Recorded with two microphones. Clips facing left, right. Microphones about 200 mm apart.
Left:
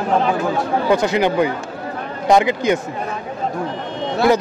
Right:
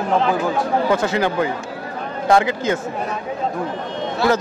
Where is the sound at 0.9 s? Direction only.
15° left (ahead or behind).